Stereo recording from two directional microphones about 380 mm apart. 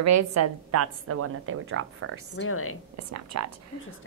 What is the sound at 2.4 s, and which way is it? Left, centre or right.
Speech, left.